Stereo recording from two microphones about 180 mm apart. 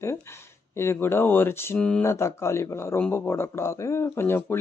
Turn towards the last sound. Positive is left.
turn(degrees=15)  # may be behind; listen again after turning